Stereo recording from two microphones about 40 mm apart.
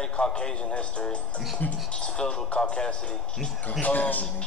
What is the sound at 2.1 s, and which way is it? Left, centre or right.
Speech, left.